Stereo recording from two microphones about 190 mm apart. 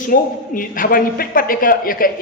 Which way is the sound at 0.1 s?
45° left (ahead or behind).